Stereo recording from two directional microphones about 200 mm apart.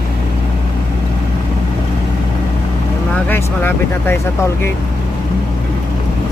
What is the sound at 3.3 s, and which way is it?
Speech, 10° left (ahead or behind).